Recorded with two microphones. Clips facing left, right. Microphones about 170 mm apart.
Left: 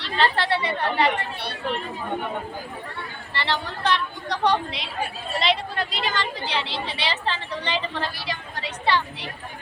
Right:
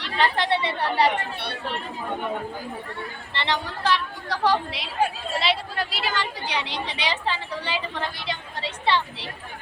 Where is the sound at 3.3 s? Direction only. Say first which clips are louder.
Even; 20° right (ahead or behind).